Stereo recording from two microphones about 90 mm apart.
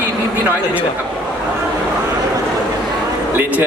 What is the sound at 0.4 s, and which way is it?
Speech, 15° right (ahead or behind).